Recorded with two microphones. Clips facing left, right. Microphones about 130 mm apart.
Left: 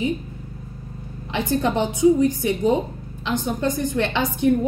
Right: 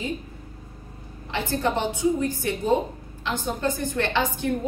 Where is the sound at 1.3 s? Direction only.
15° left (ahead or behind).